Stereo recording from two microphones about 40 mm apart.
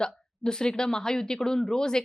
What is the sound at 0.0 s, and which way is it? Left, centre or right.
Speech, centre.